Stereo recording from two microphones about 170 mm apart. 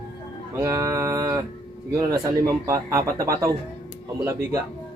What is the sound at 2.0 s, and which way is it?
Speech, 20° right (ahead or behind).